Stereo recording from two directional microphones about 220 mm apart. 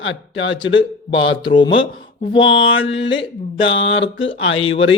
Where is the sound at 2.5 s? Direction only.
65° left (ahead or behind).